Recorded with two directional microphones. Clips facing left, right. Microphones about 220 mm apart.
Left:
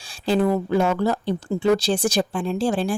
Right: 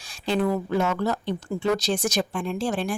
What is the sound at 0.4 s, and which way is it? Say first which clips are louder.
Speech: left 3 dB; 25° left (ahead or behind).